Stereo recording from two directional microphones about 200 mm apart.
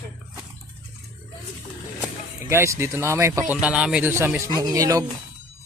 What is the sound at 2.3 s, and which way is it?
Speech, 15° right (ahead or behind).